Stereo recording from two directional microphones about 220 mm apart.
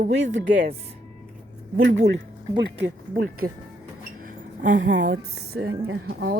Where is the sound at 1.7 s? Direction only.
55° right (ahead or behind).